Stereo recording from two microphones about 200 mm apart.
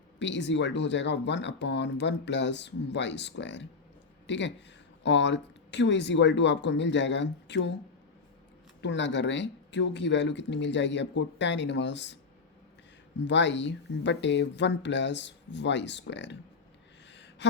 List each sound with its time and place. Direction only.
0.2 s speech: 60° left (ahead or behind)
8.8 s speech: 60° left (ahead or behind)
13.1 s speech: 60° left (ahead or behind)